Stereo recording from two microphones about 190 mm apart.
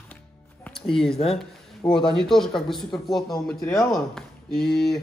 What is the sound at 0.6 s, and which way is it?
Music, centre (ahead or behind).